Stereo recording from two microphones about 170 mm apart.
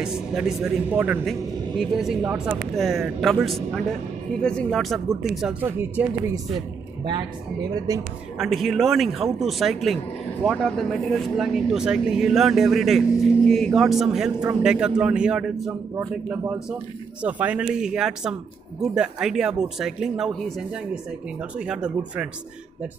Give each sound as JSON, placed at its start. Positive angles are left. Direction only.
{"t": 0.0, "sound": "speech", "side_deg": -5}
{"t": 7.7, "sound": "speech", "side_deg": -20}
{"t": 8.4, "sound": "speech", "side_deg": 0}